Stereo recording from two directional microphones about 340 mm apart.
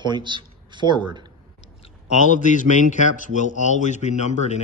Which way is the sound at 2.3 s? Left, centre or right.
Left.